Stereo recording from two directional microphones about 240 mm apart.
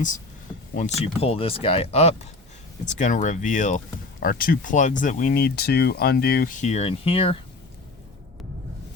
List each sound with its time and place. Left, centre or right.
0.9 s speech: left